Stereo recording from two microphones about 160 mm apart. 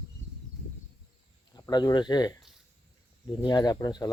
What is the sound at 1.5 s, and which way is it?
Speech, 25° left (ahead or behind).